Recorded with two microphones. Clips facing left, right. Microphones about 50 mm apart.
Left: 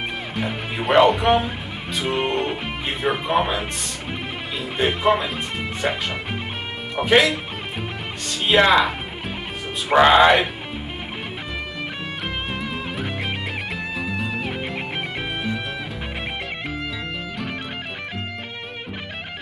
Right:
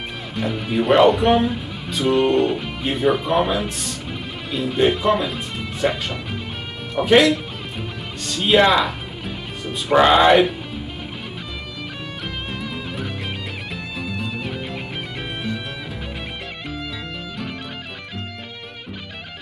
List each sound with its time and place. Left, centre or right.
0.4 s speech: centre
0.8 s speech: centre
2.1 s music: centre
2.8 s speech: centre
4.6 s music: centre
5.1 s speech: centre
7.0 s music: centre
8.3 s speech: centre
12.4 s music: centre
13.9 s music: centre